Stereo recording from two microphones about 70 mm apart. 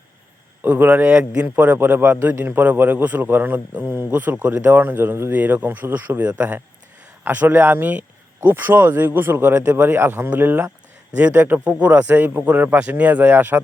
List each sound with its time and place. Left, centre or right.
0.6 s a man's voice: right